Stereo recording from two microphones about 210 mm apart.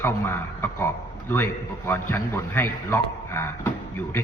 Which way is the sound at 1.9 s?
10° left (ahead or behind).